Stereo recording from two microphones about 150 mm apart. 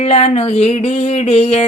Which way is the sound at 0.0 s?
45° left (ahead or behind).